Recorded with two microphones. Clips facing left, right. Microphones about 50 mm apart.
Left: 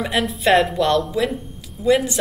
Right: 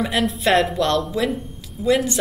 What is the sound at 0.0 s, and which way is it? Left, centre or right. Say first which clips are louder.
A woman's voice: even; centre.